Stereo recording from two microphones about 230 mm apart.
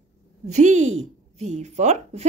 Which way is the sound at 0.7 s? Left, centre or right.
Right.